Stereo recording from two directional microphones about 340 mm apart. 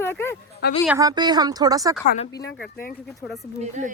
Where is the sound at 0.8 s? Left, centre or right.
Centre.